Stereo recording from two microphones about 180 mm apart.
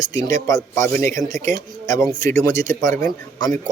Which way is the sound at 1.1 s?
45° right (ahead or behind).